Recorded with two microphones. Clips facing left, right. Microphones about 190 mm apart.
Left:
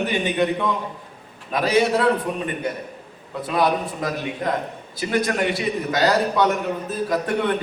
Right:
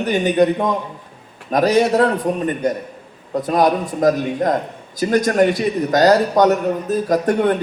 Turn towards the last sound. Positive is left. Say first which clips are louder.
# right 6 dB
turn(degrees=-45)  # may be behind; listen again after turning